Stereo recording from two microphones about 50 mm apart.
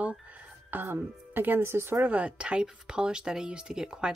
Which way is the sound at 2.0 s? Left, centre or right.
Right.